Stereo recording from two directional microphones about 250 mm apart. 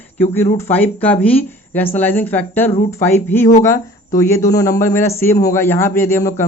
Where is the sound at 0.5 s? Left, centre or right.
Centre.